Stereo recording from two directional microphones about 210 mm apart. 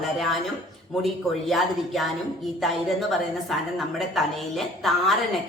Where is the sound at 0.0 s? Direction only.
Centre (ahead or behind).